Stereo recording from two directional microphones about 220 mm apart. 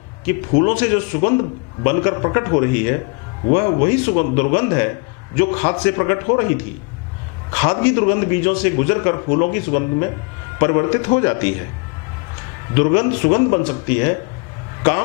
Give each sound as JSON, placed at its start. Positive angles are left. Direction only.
{"t": 0.3, "sound": "a man's voice", "side_deg": 15}
{"t": 12.7, "sound": "a man's voice", "side_deg": 15}